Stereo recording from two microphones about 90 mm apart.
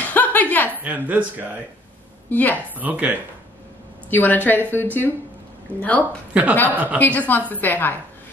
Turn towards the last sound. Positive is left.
turn(degrees=20)  # may be behind; listen again after turning